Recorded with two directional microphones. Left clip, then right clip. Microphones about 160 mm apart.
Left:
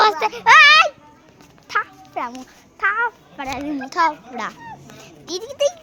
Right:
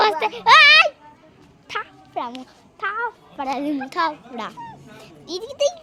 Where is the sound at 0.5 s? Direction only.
15° right (ahead or behind).